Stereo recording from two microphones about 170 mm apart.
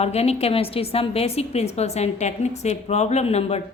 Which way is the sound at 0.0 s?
40° left (ahead or behind).